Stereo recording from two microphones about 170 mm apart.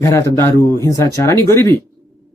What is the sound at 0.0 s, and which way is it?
Speech, 15° left (ahead or behind).